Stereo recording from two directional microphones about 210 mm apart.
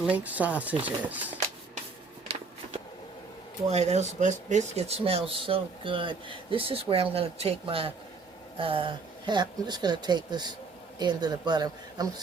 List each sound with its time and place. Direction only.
0.0 s speech: 5° right (ahead or behind)
3.7 s speech: 30° right (ahead or behind)